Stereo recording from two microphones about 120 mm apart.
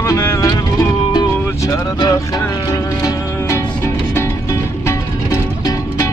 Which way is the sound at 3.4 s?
20° left (ahead or behind).